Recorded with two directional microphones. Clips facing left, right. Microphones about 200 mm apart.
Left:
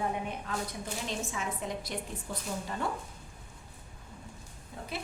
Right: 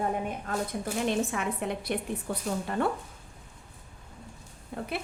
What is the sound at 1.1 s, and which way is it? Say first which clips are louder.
Speech: right 7 dB; 60° right (ahead or behind).